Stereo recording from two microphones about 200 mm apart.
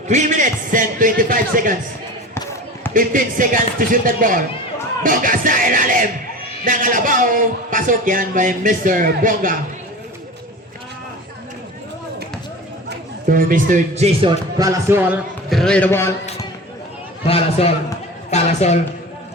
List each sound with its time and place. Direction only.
0.1 s speech: 40° right (ahead or behind)
2.3 s basketball bounce: 15° left (ahead or behind)
2.9 s a man's voice: 40° right (ahead or behind)
13.3 s speech: 40° right (ahead or behind); by 16.1 s 10° left (ahead or behind)
17.2 s a man's voice: 30° left (ahead or behind)